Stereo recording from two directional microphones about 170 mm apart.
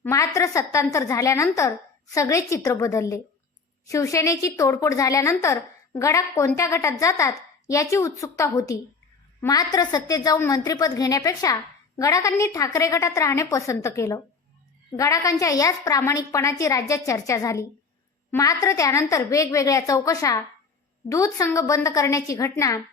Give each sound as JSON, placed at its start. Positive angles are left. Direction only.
{"t": 0.0, "sound": "a woman's voice", "side_deg": 20}